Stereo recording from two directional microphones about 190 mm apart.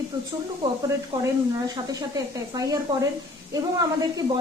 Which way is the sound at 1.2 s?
20° right (ahead or behind).